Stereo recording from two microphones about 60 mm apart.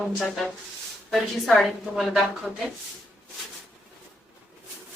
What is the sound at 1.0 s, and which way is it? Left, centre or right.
A woman's voice, centre.